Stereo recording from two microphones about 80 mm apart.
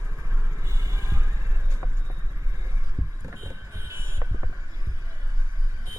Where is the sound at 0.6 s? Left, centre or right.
Right.